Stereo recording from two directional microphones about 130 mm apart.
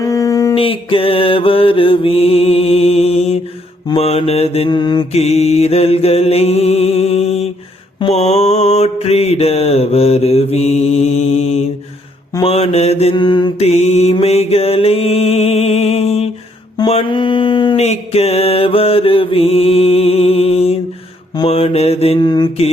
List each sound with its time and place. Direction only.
0.0 s a sound: 25° left (ahead or behind)
0.5 s mantra: 45° left (ahead or behind)
4.7 s mantra: 35° left (ahead or behind)
5.1 s mantra: 50° left (ahead or behind)
13.1 s mantra: 35° left (ahead or behind)
13.6 s mantra: 55° left (ahead or behind)
16.8 s mantra: 40° left (ahead or behind)
17.7 s mantra: 55° left (ahead or behind)
22.2 s mantra: 35° left (ahead or behind)